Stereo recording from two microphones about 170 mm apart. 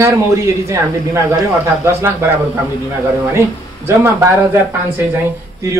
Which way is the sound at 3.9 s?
15° right (ahead or behind).